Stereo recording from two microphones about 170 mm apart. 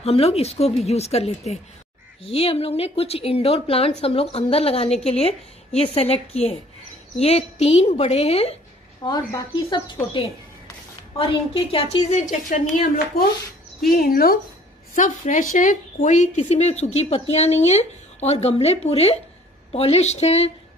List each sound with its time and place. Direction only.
0.0 s a woman's voice: 35° left (ahead or behind)
9.0 s speech: 25° left (ahead or behind)
11.1 s a woman's voice: 35° left (ahead or behind)
12.1 s speech: 45° left (ahead or behind); by 14.4 s 60° left (ahead or behind)
15.0 s a woman's voice: 45° left (ahead or behind)